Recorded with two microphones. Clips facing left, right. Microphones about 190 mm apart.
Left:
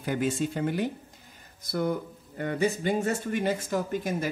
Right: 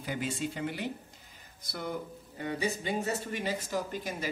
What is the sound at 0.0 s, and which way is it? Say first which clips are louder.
Speech: left 7 dB; 50° left (ahead or behind).